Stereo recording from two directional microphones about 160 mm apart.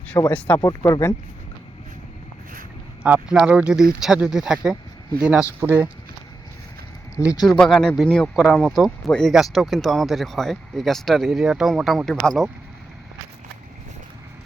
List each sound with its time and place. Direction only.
0.3 s speech: 10° left (ahead or behind)
0.7 s speech: 20° left (ahead or behind)
3.0 s speech: 5° right (ahead or behind)
7.2 s speech: 20° left (ahead or behind)
7.4 s speech: centre (ahead or behind)